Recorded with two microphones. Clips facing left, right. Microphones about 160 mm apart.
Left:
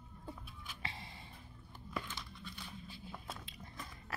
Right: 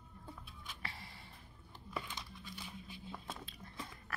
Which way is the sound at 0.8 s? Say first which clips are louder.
Left 3 dB; 20° left (ahead or behind).